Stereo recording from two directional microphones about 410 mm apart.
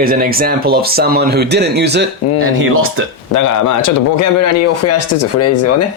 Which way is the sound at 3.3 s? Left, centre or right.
Left.